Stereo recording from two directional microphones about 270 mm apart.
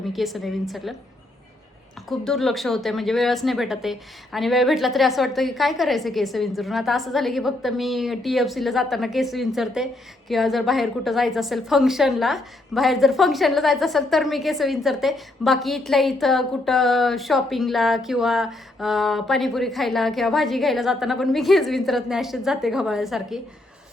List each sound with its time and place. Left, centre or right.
0.1 s speech: centre
2.0 s speech: centre